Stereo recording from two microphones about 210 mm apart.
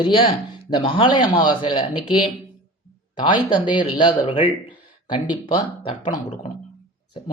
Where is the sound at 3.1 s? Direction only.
20° left (ahead or behind).